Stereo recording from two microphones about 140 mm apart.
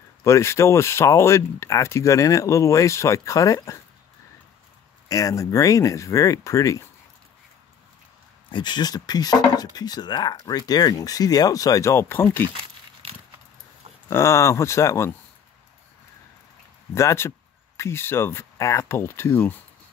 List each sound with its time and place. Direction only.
0.2 s speech: 20° left (ahead or behind)
5.0 s speech: 25° left (ahead or behind)
8.5 s speech: 35° left (ahead or behind); by 12.4 s 15° left (ahead or behind)
14.0 s speech: 20° left (ahead or behind)
16.9 s speech: 20° left (ahead or behind)